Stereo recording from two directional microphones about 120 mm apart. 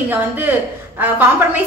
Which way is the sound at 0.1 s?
15° right (ahead or behind).